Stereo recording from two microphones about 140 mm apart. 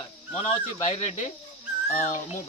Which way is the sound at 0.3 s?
45° left (ahead or behind).